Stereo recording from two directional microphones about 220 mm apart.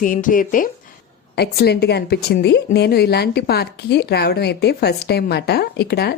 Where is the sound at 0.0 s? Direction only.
35° left (ahead or behind).